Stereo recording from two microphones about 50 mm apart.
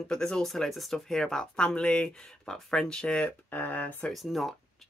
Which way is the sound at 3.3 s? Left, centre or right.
Left.